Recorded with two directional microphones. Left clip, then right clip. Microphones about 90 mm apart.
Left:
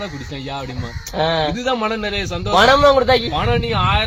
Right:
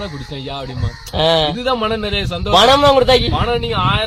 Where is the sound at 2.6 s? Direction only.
60° right (ahead or behind).